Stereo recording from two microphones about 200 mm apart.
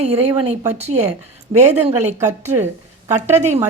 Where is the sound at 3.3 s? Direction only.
35° right (ahead or behind).